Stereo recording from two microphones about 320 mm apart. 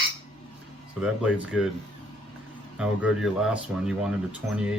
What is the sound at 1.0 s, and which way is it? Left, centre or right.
Speech, centre.